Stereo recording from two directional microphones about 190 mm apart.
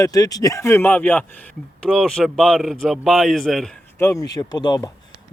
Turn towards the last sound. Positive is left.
turn(degrees=20)  # may be behind; listen again after turning